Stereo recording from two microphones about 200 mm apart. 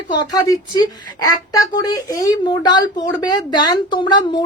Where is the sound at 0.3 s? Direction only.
20° left (ahead or behind).